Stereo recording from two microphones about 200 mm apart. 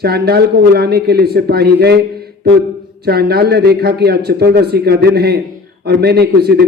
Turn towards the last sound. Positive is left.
turn(degrees=-55)  # may be behind; listen again after turning